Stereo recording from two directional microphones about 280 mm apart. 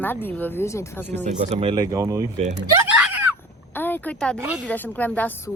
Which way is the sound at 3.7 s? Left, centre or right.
Centre.